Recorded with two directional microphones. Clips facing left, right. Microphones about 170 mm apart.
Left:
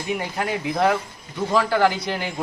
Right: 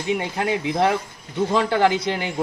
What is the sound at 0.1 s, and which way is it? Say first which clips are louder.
Speech: right 3 dB; 20° right (ahead or behind).